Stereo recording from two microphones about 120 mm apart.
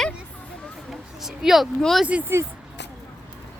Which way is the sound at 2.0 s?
15° right (ahead or behind).